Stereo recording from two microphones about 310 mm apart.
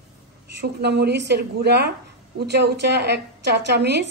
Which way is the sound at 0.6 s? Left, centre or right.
Right.